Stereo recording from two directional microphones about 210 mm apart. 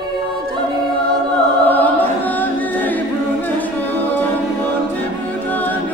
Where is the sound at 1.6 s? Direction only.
10° left (ahead or behind).